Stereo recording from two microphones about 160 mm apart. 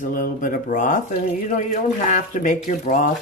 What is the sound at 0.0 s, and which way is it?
Speech, 55° left (ahead or behind).